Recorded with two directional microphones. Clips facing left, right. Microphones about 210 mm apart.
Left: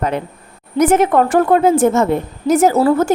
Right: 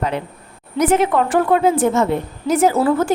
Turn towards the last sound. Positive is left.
turn(degrees=40)  # may be behind; listen again after turning